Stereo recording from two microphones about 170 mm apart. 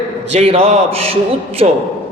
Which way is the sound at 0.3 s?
35° right (ahead or behind).